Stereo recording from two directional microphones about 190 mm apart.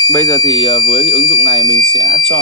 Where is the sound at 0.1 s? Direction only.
10° left (ahead or behind).